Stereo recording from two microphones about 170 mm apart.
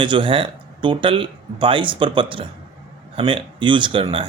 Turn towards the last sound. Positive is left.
turn(degrees=-30)  # may be behind; listen again after turning